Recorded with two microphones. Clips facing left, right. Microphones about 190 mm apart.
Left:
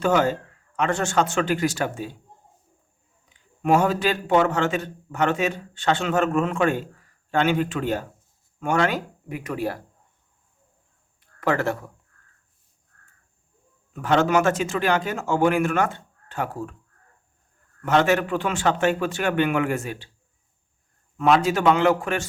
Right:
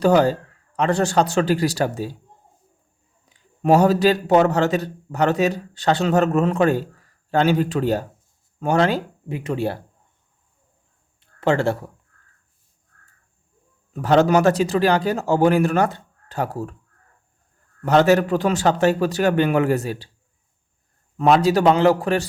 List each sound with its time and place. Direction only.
0.0 s a man's voice: 35° right (ahead or behind)
3.2 s a man's voice: 35° right (ahead or behind)
11.2 s a sound: 25° right (ahead or behind)
13.9 s a man's voice: 35° right (ahead or behind)
17.8 s a man's voice: 35° right (ahead or behind)
21.2 s a man's voice: 35° right (ahead or behind)